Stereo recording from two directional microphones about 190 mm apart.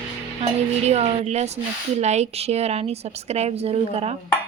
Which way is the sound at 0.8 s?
35° right (ahead or behind).